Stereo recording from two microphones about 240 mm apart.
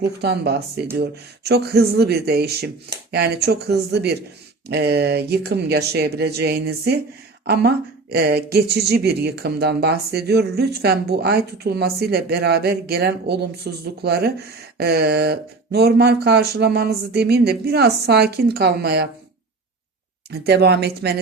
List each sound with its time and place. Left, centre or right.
0.2 s speech: right
20.3 s speech: right